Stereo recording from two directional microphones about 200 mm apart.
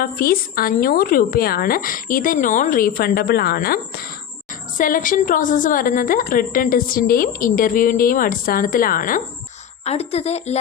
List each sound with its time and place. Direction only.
0.0 s a woman's voice: 45° left (ahead or behind)
9.8 s speech: 30° left (ahead or behind)